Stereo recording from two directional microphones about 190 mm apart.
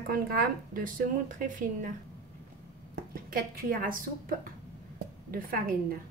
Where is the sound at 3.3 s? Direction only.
50° right (ahead or behind).